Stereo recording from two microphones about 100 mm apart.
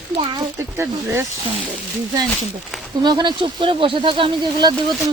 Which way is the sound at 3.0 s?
50° right (ahead or behind).